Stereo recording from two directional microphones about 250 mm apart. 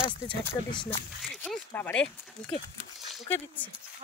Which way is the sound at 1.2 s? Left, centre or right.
Centre.